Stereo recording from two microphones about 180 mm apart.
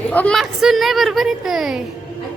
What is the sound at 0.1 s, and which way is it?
A woman's voice, 5° left (ahead or behind).